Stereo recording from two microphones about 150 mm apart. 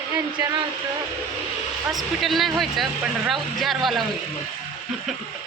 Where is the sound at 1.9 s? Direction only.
Centre (ahead or behind).